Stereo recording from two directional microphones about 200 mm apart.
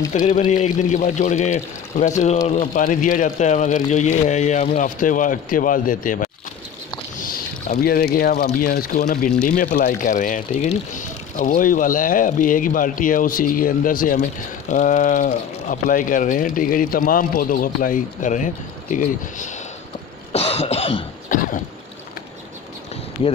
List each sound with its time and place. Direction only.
0.1 s speech: 40° left (ahead or behind)
7.8 s speech: 50° left (ahead or behind)
20.3 s cough: 30° left (ahead or behind)